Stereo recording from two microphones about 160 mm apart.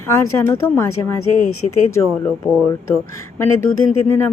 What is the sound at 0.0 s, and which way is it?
Speech, 15° left (ahead or behind).